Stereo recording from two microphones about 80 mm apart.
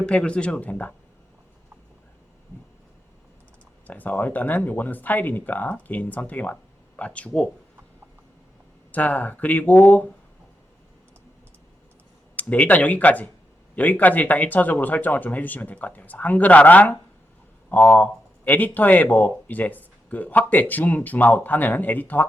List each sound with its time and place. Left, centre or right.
0.0 s speech: centre
3.8 s speech: left
8.9 s speech: left
12.4 s speech: centre